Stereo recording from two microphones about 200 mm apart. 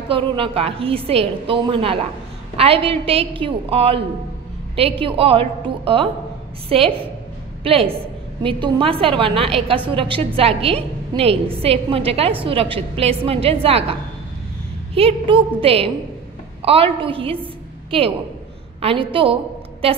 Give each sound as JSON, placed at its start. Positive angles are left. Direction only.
{"t": 0.1, "sound": "a woman's voice", "side_deg": -25}
{"t": 15.0, "sound": "a woman's voice", "side_deg": -25}
{"t": 18.8, "sound": "a woman's voice", "side_deg": -30}